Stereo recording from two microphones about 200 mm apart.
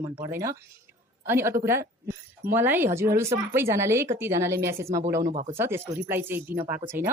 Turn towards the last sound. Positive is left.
turn(degrees=-10)  # may be behind; listen again after turning